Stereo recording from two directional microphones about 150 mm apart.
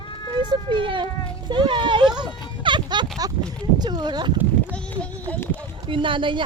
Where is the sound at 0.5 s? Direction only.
30° right (ahead or behind).